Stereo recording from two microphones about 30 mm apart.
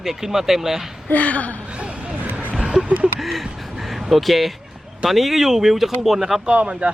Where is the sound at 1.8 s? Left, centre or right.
Right.